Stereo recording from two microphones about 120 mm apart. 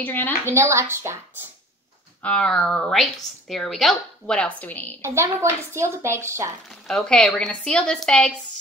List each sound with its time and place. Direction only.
0.0 s a woman's voice: 15° left (ahead or behind)
0.5 s a woman's voice: 20° right (ahead or behind)
2.2 s a woman's voice: 10° left (ahead or behind)
5.0 s a woman's voice: 25° right (ahead or behind)
6.7 s a woman's voice: 5° left (ahead or behind)